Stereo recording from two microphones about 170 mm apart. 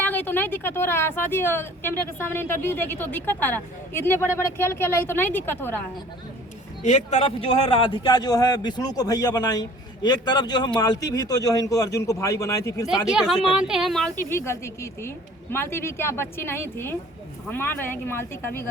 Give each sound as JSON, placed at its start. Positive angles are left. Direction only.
{"t": 0.0, "sound": "a woman's voice", "side_deg": 10}
{"t": 6.8, "sound": "a man's voice", "side_deg": 40}
{"t": 13.1, "sound": "speech", "side_deg": -5}
{"t": 14.2, "sound": "a woman's voice", "side_deg": 15}